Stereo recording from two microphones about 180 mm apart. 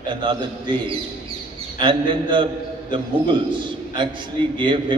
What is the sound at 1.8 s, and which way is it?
A man's voice, 25° right (ahead or behind).